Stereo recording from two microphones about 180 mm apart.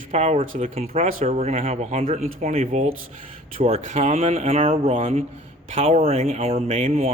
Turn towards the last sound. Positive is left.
turn(degrees=-40)  # may be behind; listen again after turning